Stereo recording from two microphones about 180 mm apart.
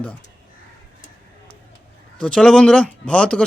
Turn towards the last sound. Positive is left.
turn(degrees=5)  # may be behind; listen again after turning